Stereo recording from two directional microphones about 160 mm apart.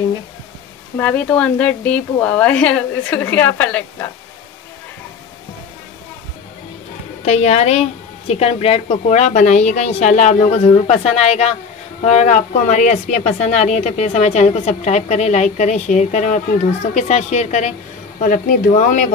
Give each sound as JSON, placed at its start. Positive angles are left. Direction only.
{"t": 0.9, "sound": "a woman's voice", "side_deg": 10}
{"t": 7.2, "sound": "a woman's voice", "side_deg": 40}
{"t": 18.2, "sound": "speech", "side_deg": 60}
{"t": 18.7, "sound": "a woman's voice", "side_deg": 50}